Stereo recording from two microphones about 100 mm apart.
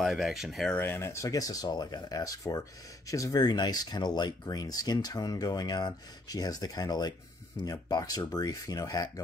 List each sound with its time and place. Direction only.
0.0 s speech: centre (ahead or behind)
0.7 s speech: 20° left (ahead or behind); by 9.2 s 35° left (ahead or behind)